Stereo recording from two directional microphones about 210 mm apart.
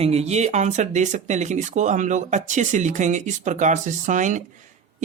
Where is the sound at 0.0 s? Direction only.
30° right (ahead or behind).